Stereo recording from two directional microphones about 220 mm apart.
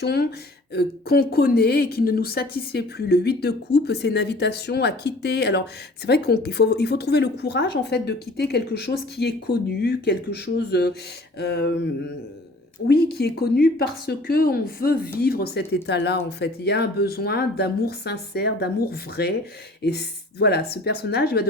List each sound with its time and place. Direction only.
0.0 s a woman's voice: 45° left (ahead or behind)
12.9 s a woman's voice: 45° left (ahead or behind)